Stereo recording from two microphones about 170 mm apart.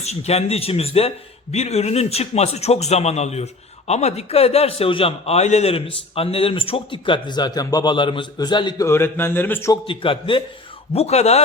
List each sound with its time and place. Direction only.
0.0 s a man's voice: 40° left (ahead or behind)
8.9 s speech: 15° left (ahead or behind)
9.8 s a man's voice: 30° left (ahead or behind)